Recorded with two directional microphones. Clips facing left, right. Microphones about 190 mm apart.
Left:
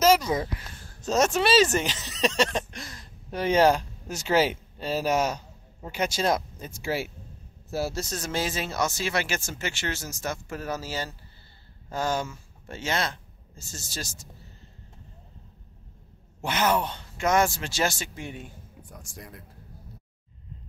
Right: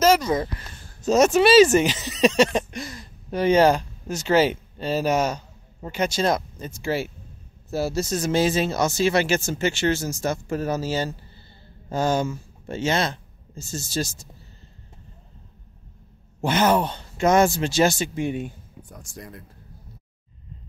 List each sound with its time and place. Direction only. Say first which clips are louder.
0.0 s speech: right 2 dB; 5° left (ahead or behind)
1.0 s speech: right 7 dB; 5° right (ahead or behind)
8.2 s speech: right 10 dB; 20° right (ahead or behind)
16.4 s speech: right 5 dB; 35° right (ahead or behind); by 18.5 s 20° right (ahead or behind)
19.1 s speech: right 5 dB; 5° left (ahead or behind)